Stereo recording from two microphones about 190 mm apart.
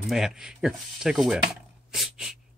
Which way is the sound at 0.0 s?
Centre (ahead or behind).